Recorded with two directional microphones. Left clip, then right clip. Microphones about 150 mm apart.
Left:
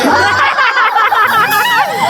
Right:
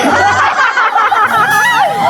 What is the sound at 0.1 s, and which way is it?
Music, 10° left (ahead or behind).